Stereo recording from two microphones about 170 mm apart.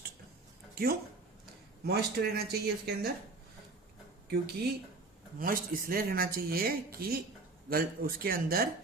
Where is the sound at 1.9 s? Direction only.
70° right (ahead or behind).